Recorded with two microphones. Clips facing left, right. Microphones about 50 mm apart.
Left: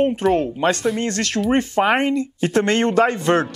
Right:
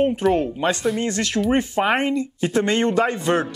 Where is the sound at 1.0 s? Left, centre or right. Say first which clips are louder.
Even; left.